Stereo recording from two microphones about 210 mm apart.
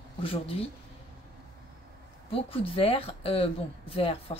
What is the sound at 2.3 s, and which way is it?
A woman's voice, 25° left (ahead or behind).